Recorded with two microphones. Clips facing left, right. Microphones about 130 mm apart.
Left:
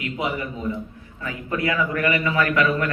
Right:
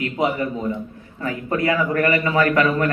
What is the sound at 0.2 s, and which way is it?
A man's voice, 40° right (ahead or behind).